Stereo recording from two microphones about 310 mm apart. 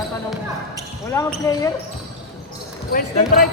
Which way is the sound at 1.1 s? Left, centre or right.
Centre.